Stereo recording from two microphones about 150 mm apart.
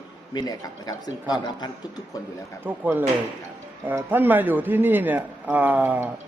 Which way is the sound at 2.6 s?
15° right (ahead or behind).